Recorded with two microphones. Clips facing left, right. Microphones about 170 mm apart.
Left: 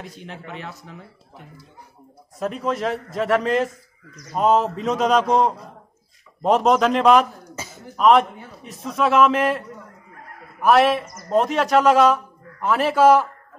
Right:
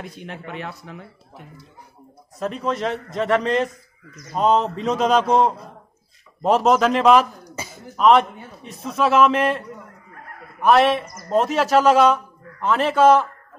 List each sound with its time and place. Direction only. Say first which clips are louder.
0.0 s speech: right 2 dB; 55° right (ahead or behind)
2.3 s a man's voice: even; centre (ahead or behind)
7.4 s a sound: right 1 dB; 15° right (ahead or behind)
7.9 s a man's voice: even; centre (ahead or behind)